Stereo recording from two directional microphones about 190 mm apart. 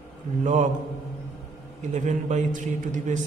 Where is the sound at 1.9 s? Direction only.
40° right (ahead or behind).